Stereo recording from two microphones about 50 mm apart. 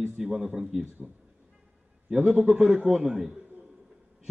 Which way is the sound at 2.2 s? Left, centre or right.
Right.